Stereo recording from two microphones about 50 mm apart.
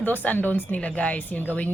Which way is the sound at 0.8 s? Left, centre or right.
Left.